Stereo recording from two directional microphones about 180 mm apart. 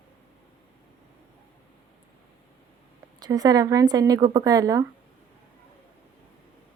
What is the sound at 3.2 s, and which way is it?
A woman's voice, 20° right (ahead or behind).